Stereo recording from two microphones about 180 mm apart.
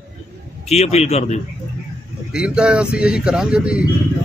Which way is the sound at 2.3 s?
5° right (ahead or behind).